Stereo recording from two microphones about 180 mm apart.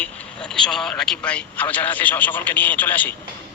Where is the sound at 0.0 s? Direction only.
5° left (ahead or behind).